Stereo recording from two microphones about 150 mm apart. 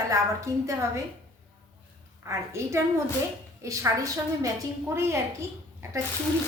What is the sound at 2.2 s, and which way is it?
A woman's voice, 20° right (ahead or behind).